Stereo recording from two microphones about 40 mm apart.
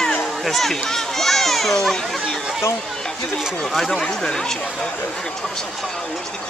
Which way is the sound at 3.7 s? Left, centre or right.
Centre.